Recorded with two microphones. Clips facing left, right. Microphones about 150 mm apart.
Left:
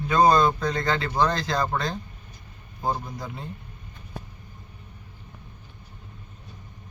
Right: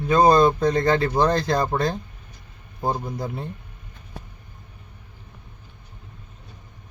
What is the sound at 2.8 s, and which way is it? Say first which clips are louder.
Speech: right 3 dB; 25° right (ahead or behind).